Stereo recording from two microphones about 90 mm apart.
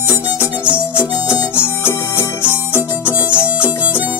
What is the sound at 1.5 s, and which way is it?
Music, 25° left (ahead or behind).